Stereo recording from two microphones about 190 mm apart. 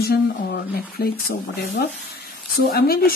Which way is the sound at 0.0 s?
55° left (ahead or behind).